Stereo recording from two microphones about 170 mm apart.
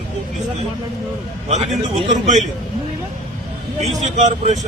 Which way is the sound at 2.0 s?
45° right (ahead or behind).